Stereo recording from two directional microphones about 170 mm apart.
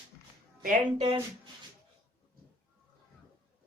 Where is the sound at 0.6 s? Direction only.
50° right (ahead or behind).